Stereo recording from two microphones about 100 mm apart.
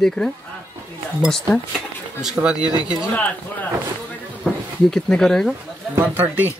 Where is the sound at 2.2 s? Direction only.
10° right (ahead or behind).